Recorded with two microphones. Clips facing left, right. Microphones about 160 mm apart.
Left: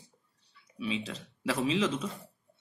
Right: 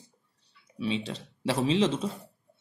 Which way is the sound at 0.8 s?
30° right (ahead or behind).